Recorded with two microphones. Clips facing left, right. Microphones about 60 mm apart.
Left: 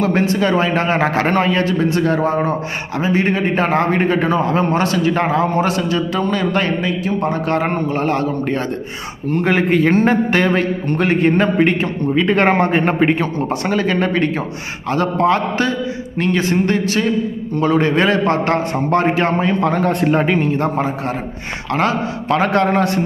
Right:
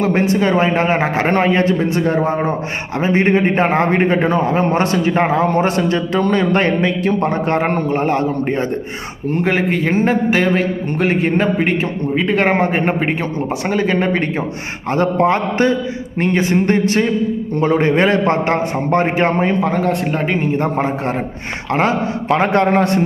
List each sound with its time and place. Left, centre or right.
0.0 s a man's voice: right
1.3 s a man's voice: right
3.0 s a man's voice: right
9.4 s a man's voice: centre; by 19.5 s right
19.6 s a man's voice: centre
20.5 s a man's voice: right